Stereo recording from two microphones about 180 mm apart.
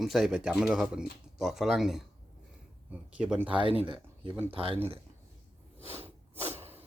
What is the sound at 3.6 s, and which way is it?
Speech, 30° right (ahead or behind).